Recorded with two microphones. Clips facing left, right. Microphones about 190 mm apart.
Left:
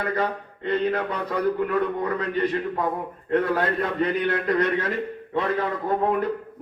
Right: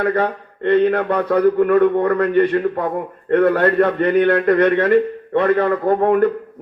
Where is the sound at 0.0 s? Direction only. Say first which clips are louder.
Right 7 dB; 65° right (ahead or behind).